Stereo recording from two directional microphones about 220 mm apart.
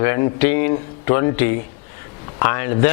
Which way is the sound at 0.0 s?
15° left (ahead or behind).